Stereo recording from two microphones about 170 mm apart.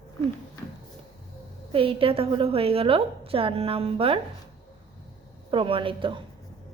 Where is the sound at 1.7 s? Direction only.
30° right (ahead or behind).